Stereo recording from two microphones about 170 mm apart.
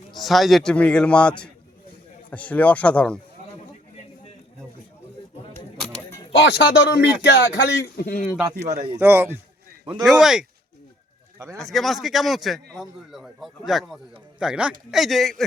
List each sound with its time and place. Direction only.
0.1 s a man's voice: centre (ahead or behind)
6.3 s speech: 90° left
7.2 s speech: 80° left
7.9 s a man's voice: 60° left (ahead or behind)
8.5 s a man's voice: 40° right (ahead or behind)
9.0 s a man's voice: 10° right (ahead or behind)
10.0 s a man's voice: centre (ahead or behind)
11.3 s speech: 15° right (ahead or behind)
11.6 s a man's voice: centre (ahead or behind)